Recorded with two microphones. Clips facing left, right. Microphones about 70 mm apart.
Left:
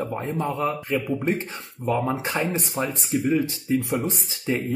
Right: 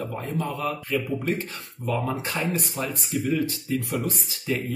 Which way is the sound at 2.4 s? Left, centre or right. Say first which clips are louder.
Left 2 dB; left.